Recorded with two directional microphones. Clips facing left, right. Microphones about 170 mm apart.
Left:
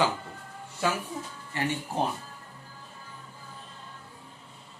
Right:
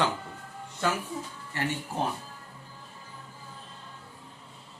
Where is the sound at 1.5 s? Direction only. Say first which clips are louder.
Left 1 dB; 15° left (ahead or behind).